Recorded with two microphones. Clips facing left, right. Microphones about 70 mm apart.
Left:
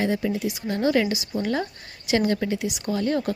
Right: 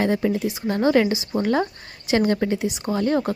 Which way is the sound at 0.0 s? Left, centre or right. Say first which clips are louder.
Right 3 dB; right.